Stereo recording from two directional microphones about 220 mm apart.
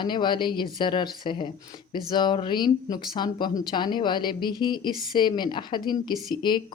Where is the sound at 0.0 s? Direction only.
20° left (ahead or behind).